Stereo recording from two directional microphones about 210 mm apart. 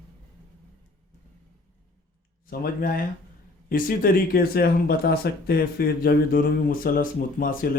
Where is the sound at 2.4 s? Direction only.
45° left (ahead or behind).